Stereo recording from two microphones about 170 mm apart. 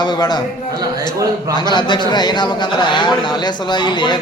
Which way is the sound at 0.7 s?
20° right (ahead or behind).